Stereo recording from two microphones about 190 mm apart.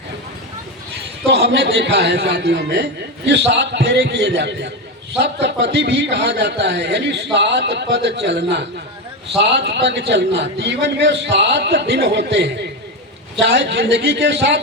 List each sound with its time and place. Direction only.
1.3 s a man's voice: 65° right (ahead or behind)